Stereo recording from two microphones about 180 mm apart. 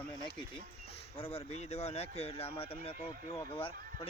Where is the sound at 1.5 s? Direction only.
35° left (ahead or behind).